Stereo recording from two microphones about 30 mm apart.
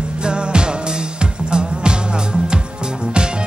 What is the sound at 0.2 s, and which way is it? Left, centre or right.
Music, right.